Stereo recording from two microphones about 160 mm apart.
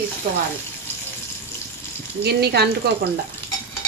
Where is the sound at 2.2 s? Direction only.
90° right.